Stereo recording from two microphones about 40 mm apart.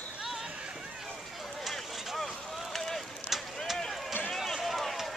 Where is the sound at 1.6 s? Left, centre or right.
Centre.